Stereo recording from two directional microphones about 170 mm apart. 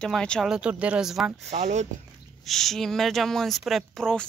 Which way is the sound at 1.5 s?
40° right (ahead or behind).